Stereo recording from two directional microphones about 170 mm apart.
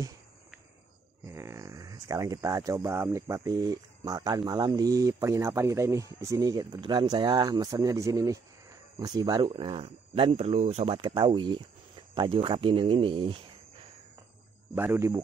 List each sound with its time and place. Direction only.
1.3 s speech: 15° right (ahead or behind)
14.8 s a man's voice: 15° right (ahead or behind)